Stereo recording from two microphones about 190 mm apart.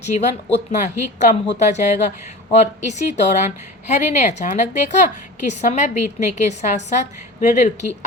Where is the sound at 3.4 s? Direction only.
40° left (ahead or behind).